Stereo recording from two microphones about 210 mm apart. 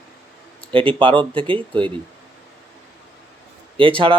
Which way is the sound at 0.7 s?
25° right (ahead or behind).